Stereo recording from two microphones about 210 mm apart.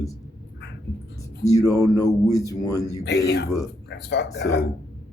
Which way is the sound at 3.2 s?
55° left (ahead or behind).